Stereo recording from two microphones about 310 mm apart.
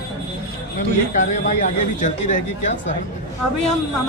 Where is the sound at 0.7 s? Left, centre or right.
Left.